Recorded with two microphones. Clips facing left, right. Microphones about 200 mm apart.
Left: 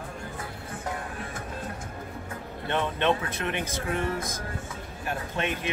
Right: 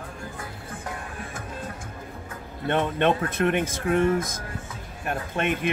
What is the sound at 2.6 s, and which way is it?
Speech, 50° right (ahead or behind).